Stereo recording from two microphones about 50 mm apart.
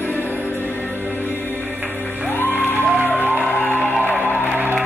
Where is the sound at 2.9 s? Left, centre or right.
Right.